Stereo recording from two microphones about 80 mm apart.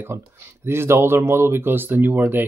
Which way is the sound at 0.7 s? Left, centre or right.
Right.